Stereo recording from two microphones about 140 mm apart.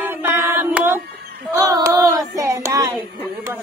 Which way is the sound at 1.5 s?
25° right (ahead or behind).